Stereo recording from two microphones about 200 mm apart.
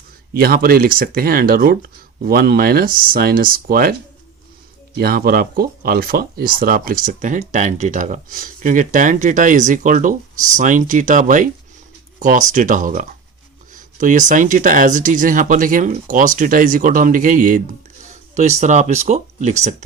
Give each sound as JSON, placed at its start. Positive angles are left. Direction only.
{"t": 0.3, "sound": "speech", "side_deg": -50}
{"t": 4.9, "sound": "speech", "side_deg": -50}